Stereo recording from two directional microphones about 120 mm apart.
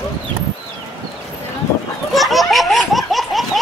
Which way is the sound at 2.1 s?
Centre (ahead or behind).